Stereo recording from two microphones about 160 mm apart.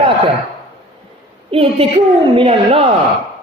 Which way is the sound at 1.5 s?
35° right (ahead or behind).